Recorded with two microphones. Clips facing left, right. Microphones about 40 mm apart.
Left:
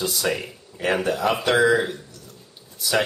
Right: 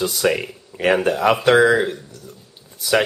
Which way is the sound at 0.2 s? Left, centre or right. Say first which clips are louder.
Right 7 dB; right.